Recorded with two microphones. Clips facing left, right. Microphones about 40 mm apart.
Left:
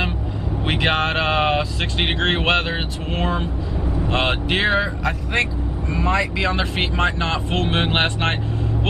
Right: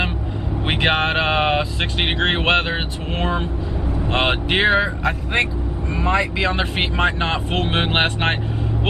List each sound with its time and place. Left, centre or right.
0.7 s speech: centre